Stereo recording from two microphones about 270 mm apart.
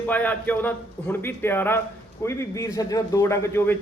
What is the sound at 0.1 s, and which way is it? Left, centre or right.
A man's voice, centre.